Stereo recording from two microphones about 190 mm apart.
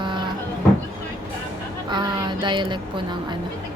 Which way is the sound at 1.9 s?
25° right (ahead or behind).